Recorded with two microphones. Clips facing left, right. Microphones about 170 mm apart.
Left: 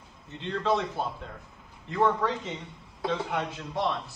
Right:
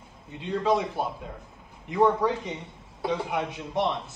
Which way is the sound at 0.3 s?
10° right (ahead or behind).